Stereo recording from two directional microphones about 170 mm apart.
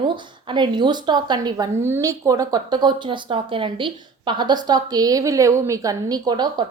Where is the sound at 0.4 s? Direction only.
25° right (ahead or behind).